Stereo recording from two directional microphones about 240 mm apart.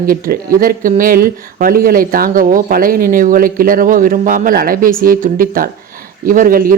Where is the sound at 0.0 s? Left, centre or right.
Right.